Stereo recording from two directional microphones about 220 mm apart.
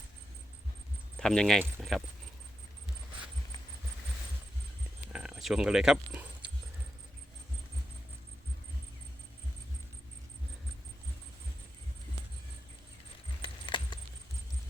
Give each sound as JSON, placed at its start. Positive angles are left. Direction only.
{"t": 1.1, "sound": "speech", "side_deg": 5}
{"t": 5.1, "sound": "speech", "side_deg": -5}
{"t": 13.4, "sound": "a sound", "side_deg": 20}